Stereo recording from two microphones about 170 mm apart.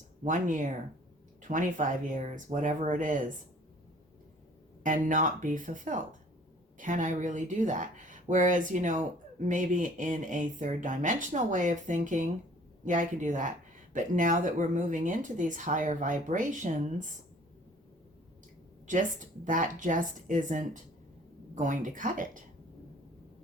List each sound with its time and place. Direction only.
0.3 s speech: 50° right (ahead or behind)
4.8 s speech: 50° right (ahead or behind)
18.9 s speech: 50° right (ahead or behind)